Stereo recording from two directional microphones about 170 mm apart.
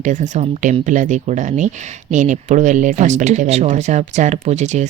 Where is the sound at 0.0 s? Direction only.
45° right (ahead or behind).